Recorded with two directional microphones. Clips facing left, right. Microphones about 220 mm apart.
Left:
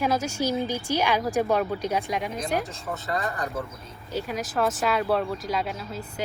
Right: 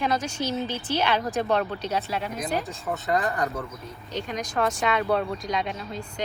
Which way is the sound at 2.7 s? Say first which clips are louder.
Right 3 dB; centre (ahead or behind).